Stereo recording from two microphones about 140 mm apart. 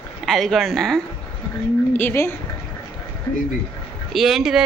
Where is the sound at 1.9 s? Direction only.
15° left (ahead or behind).